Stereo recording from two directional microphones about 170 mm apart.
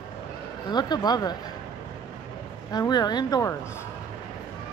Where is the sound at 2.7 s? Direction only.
25° left (ahead or behind).